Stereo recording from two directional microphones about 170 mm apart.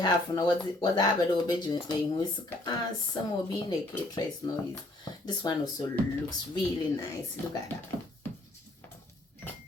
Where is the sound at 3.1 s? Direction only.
25° left (ahead or behind).